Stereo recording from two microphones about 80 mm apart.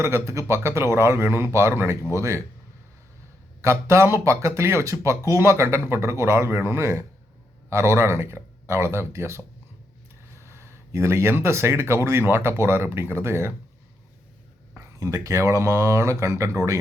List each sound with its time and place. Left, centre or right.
0.0 s speech: right
3.6 s speech: right
14.8 s speech: right